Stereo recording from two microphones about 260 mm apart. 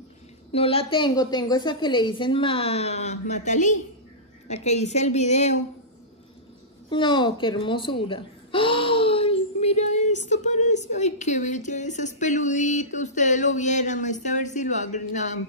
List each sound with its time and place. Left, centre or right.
0.5 s speech: left
6.9 s speech: centre